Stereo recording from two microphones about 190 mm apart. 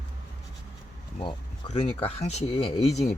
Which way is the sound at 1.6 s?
35° left (ahead or behind).